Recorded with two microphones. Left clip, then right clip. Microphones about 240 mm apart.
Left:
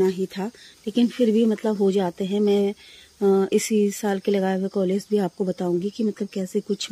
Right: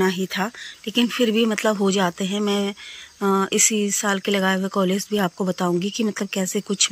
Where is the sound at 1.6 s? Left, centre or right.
Right.